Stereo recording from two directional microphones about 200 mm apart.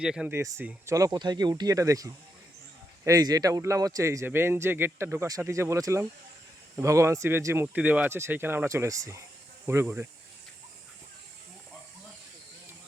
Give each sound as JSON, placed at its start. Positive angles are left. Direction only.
{"t": 0.0, "sound": "a man's voice", "side_deg": -5}